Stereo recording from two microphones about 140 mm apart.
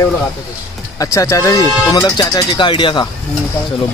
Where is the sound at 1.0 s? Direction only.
25° left (ahead or behind).